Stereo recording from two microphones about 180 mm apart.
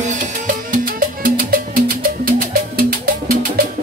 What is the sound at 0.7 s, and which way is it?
Music, 50° right (ahead or behind).